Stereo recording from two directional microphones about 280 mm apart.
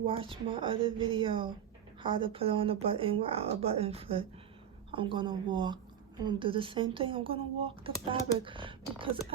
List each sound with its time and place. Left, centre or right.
0.0 s speech: centre